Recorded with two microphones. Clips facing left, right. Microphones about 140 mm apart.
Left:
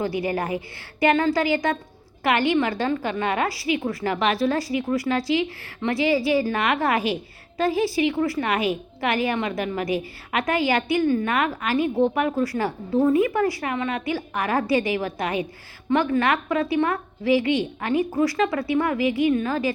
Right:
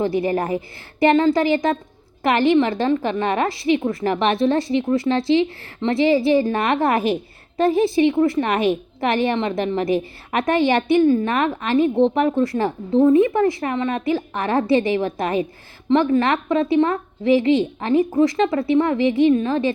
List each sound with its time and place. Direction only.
0.0 s a woman's voice: 30° right (ahead or behind)